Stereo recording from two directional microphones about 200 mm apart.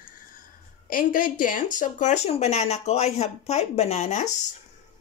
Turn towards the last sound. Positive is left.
turn(degrees=35)  # may be behind; listen again after turning